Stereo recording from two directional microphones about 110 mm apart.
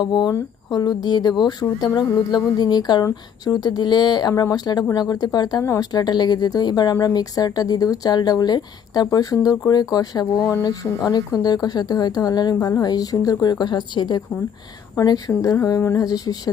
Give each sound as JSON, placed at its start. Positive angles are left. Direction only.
{"t": 0.0, "sound": "speech", "side_deg": 40}
{"t": 15.3, "sound": "speech", "side_deg": 25}